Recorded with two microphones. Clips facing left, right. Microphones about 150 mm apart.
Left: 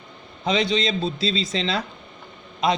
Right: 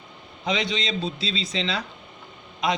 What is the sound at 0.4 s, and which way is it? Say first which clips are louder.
A man's voice: left 5 dB; 35° left (ahead or behind).